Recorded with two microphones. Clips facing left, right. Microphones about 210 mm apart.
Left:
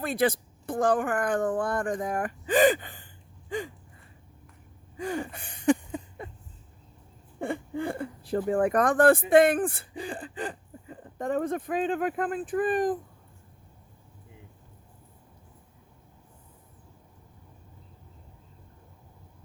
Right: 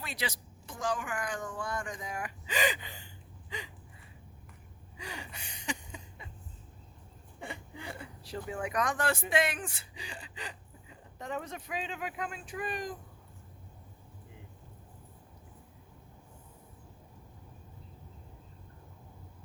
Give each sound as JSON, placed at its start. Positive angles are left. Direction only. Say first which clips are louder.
{"t": 0.0, "sound": "speech", "louder": "left 13 dB", "side_deg": 55}
{"t": 4.9, "sound": "a sound", "louder": "left 13 dB", "side_deg": 50}
{"t": 7.3, "sound": "speech", "louder": "left 13 dB", "side_deg": 50}